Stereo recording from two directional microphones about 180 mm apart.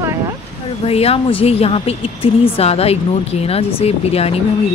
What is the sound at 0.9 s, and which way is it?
A woman's voice, 35° left (ahead or behind).